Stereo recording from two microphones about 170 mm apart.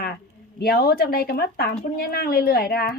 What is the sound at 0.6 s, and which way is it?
Speech, 65° left (ahead or behind).